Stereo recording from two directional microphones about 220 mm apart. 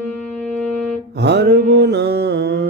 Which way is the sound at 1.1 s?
50° right (ahead or behind).